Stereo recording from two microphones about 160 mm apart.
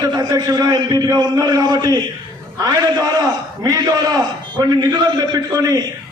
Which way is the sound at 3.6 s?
25° right (ahead or behind).